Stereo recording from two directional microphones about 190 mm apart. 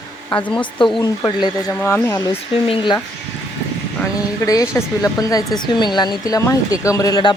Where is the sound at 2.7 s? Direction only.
25° left (ahead or behind).